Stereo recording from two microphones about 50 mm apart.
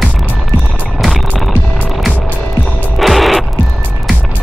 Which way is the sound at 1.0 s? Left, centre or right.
Centre.